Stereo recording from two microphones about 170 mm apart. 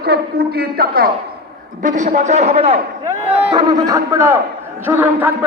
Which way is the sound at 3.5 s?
25° right (ahead or behind).